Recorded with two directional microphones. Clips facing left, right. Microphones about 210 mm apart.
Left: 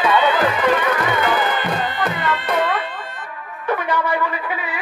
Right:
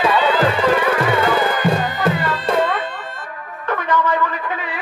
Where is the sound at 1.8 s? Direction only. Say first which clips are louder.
Right 3 dB; 45° right (ahead or behind).